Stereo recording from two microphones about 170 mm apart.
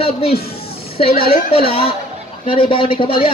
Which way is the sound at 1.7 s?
35° left (ahead or behind).